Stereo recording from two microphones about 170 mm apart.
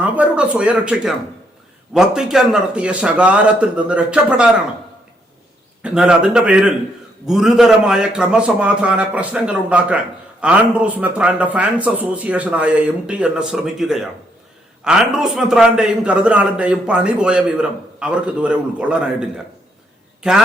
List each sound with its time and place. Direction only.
0.0 s a sound: 10° right (ahead or behind)
1.9 s a man's voice: 5° right (ahead or behind)
5.8 s a man's voice: 5° right (ahead or behind)